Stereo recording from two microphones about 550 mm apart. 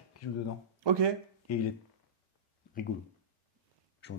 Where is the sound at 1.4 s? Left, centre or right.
Left.